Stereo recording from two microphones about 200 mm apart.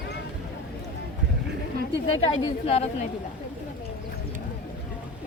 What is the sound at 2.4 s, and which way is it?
Speech, 30° left (ahead or behind).